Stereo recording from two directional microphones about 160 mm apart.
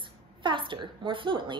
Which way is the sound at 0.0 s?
30° right (ahead or behind).